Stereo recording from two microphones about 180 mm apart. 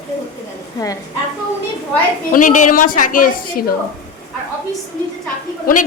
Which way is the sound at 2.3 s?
45° left (ahead or behind).